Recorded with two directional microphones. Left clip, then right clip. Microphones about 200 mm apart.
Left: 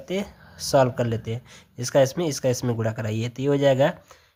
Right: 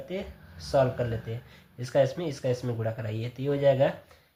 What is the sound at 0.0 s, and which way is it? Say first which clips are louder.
Speech: left 6 dB; 45° left (ahead or behind).